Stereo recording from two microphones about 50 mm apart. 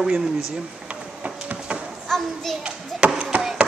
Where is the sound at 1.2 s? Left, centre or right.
Right.